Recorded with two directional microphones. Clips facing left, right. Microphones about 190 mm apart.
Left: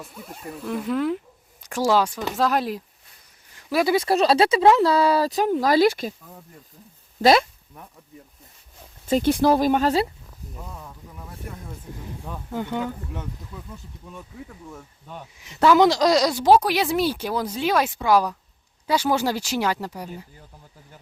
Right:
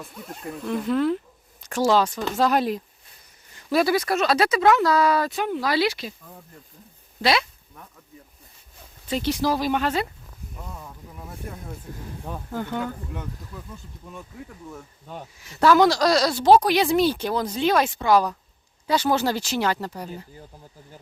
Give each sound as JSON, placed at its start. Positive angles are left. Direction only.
{"t": 0.0, "sound": "a woman's voice", "side_deg": 5}
{"t": 3.8, "sound": "speech", "side_deg": 25}
{"t": 7.2, "sound": "speech", "side_deg": 45}
{"t": 9.0, "sound": "speech", "side_deg": 50}
{"t": 10.6, "sound": "speech", "side_deg": 0}
{"t": 12.5, "sound": "a woman's voice", "side_deg": 15}
{"t": 15.4, "sound": "a woman's voice", "side_deg": 20}